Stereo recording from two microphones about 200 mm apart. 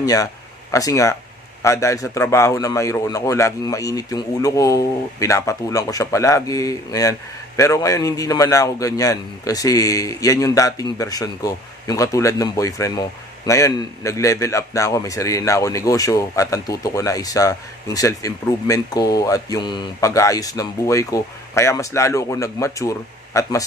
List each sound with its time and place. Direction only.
0.0 s a man's voice: 15° left (ahead or behind)